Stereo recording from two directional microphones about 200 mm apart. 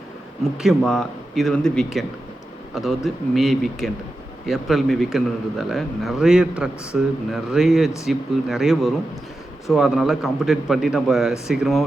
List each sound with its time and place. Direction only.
0.5 s a man's voice: centre (ahead or behind)